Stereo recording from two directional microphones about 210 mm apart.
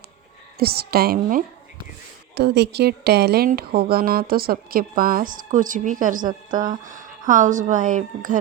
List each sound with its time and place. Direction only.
0.5 s speech: 45° right (ahead or behind)
2.3 s speech: 55° right (ahead or behind)